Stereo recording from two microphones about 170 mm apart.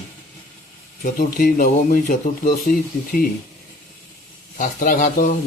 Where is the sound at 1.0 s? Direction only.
50° left (ahead or behind).